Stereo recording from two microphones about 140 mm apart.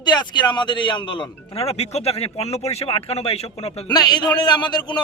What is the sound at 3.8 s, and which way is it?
A man's voice, 30° left (ahead or behind).